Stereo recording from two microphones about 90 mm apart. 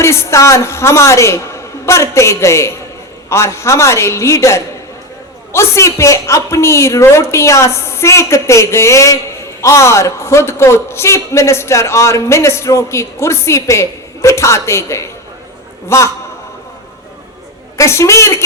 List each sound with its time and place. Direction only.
0.0 s a man's voice: 30° left (ahead or behind)
17.7 s a man's voice: 35° left (ahead or behind)